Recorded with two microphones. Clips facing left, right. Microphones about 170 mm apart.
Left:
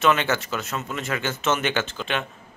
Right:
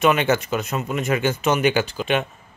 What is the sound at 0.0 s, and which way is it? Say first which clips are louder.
A man's voice: right 3 dB; 15° right (ahead or behind).